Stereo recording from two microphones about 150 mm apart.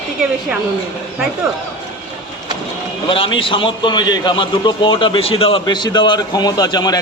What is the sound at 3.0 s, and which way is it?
A man's voice, 35° left (ahead or behind).